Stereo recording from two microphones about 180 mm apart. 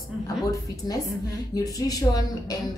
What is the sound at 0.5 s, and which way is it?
A woman's voice, 20° left (ahead or behind).